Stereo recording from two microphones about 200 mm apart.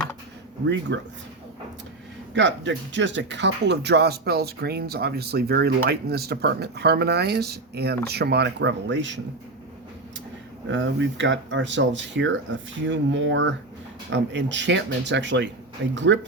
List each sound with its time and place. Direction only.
0.6 s speech: 65° right (ahead or behind)
2.3 s speech: 65° right (ahead or behind)
10.7 s speech: 70° right (ahead or behind)